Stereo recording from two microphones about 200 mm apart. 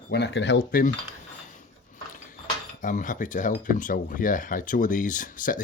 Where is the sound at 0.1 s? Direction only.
55° left (ahead or behind).